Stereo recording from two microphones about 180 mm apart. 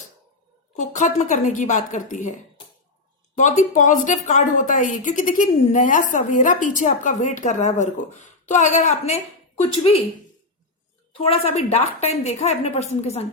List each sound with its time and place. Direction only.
0.8 s a woman's voice: 40° left (ahead or behind)
11.2 s a woman's voice: 35° left (ahead or behind)